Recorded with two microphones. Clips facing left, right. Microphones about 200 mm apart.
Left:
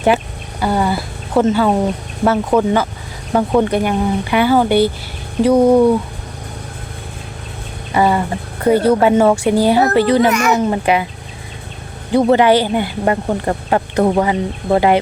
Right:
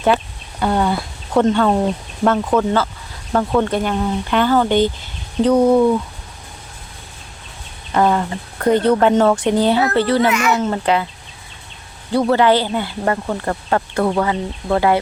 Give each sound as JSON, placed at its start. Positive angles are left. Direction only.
{"t": 0.6, "sound": "speech", "side_deg": 5}
{"t": 7.9, "sound": "speech", "side_deg": 5}
{"t": 10.2, "sound": "speech", "side_deg": 40}
{"t": 10.5, "sound": "speech", "side_deg": 15}
{"t": 12.1, "sound": "speech", "side_deg": 15}